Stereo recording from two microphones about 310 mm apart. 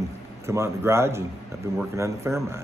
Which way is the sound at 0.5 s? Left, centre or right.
Centre.